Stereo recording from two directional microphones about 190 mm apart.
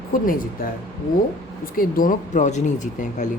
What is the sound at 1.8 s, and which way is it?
Speech, 45° left (ahead or behind).